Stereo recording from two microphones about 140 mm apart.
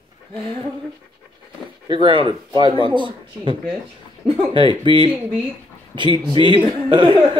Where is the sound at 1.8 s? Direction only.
35° right (ahead or behind).